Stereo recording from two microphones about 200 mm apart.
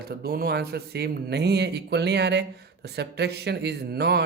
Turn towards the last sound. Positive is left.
turn(degrees=-55)  # may be behind; listen again after turning